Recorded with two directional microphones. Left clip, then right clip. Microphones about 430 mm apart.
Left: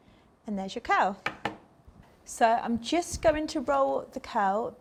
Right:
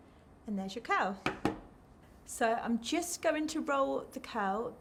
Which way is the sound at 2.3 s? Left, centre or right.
Centre.